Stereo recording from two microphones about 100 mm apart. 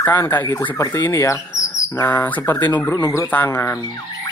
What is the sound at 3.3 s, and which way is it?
Speech, 20° left (ahead or behind).